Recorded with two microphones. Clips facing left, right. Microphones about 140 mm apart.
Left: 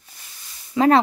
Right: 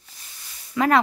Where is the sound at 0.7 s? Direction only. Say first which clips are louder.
Left 4 dB; 30° left (ahead or behind).